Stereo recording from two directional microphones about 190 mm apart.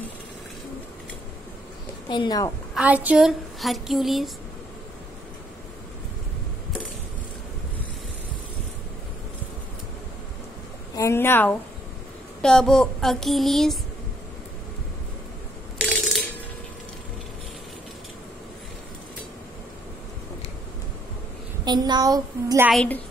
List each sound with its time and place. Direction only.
2.0 s a woman's voice: 25° left (ahead or behind)
2.7 s speech: 5° right (ahead or behind)
11.0 s a woman's voice: 15° left (ahead or behind)
15.8 s a sound: centre (ahead or behind)
21.6 s a woman's voice: 20° right (ahead or behind)
22.7 s speech: 5° left (ahead or behind)